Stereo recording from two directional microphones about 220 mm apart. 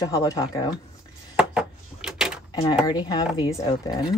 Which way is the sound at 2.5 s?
20° left (ahead or behind).